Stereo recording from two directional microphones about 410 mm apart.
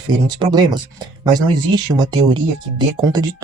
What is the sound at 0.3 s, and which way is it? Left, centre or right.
Speech, centre.